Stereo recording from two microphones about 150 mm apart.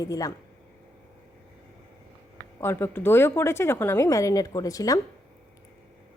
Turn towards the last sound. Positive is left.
turn(degrees=25)  # may be behind; listen again after turning